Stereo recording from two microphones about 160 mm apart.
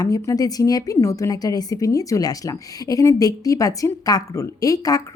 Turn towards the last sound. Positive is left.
turn(degrees=20)  # may be behind; listen again after turning